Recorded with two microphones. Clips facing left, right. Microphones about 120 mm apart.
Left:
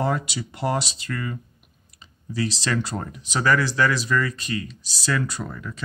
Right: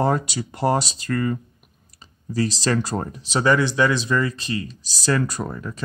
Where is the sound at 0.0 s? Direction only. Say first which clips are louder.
Right 4 dB; 40° right (ahead or behind).